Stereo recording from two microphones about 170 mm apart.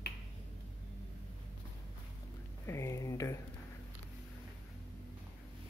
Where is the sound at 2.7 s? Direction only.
15° left (ahead or behind).